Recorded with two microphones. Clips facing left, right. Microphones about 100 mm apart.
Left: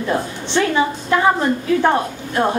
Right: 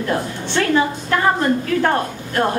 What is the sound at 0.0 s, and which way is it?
Speech, 10° left (ahead or behind).